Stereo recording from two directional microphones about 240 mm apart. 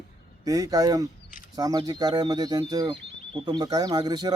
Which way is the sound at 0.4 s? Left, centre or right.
Centre.